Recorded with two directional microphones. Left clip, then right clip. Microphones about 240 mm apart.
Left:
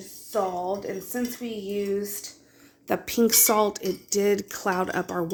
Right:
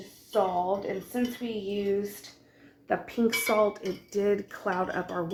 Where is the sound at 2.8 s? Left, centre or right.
Left.